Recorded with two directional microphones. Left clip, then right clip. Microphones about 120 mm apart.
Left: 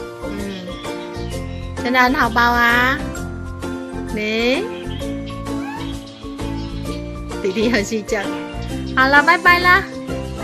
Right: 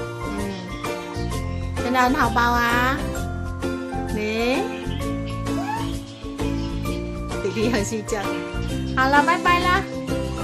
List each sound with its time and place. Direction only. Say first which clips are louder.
1.9 s a child's voice: left 4 dB; 30° left (ahead or behind)
4.2 s a child's voice: left 5 dB; 40° left (ahead or behind)
7.6 s a child's voice: left 5 dB; 40° left (ahead or behind)